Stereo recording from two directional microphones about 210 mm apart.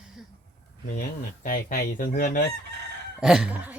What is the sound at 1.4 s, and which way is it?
Fowl, 40° left (ahead or behind).